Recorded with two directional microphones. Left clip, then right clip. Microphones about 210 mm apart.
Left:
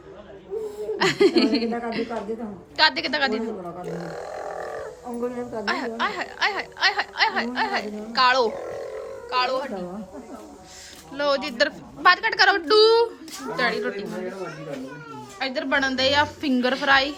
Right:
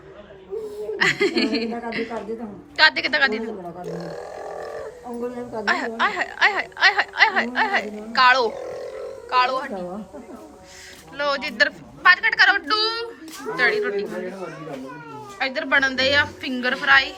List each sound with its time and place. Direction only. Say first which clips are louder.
0.9 s a woman's voice: left 1 dB; 15° left (ahead or behind); by 5.6 s 5° right (ahead or behind)
5.6 s a woman's voice: right 5 dB; 10° left (ahead or behind)
8.5 s a sound: right 1 dB; centre (ahead or behind)
9.3 s a woman's voice: right 4 dB; 10° left (ahead or behind)
11.2 s a woman's voice: right 1 dB; 15° left (ahead or behind)
13.6 s a woman's voice: right 4 dB; 15° left (ahead or behind)
15.4 s a woman's voice: right 3 dB; 10° left (ahead or behind)